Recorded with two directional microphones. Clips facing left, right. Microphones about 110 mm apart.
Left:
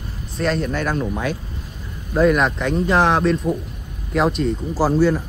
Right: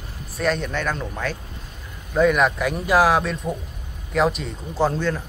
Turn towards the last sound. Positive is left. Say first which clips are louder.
# left 5 dB
turn(degrees=10)  # may be behind; listen again after turning